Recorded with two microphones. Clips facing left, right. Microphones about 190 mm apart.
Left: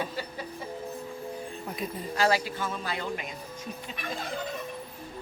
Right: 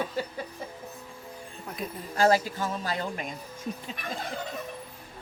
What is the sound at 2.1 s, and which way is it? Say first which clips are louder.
Speech: right 3 dB; 45° right (ahead or behind).